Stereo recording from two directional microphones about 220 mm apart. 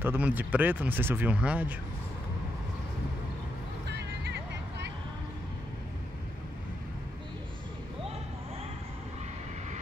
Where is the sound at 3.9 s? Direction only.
50° right (ahead or behind).